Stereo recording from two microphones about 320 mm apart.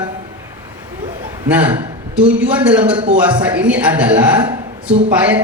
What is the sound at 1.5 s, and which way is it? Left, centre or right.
A woman's voice, centre.